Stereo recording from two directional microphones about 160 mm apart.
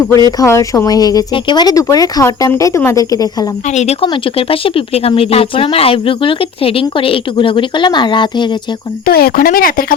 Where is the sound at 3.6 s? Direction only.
45° left (ahead or behind).